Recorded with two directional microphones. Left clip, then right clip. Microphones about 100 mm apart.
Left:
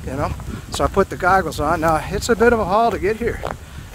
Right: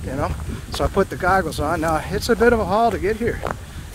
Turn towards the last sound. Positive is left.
turn(degrees=40)  # may be behind; listen again after turning